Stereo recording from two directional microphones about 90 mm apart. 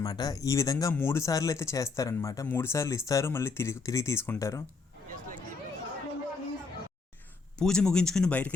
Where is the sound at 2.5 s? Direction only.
25° left (ahead or behind).